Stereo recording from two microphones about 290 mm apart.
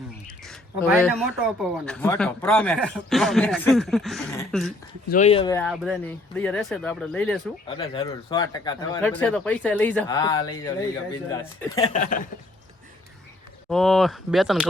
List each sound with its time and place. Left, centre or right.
0.4 s speech: centre
5.0 s speech: left
5.5 s speech: centre
7.8 s speech: centre
11.9 s speech: left
13.7 s speech: centre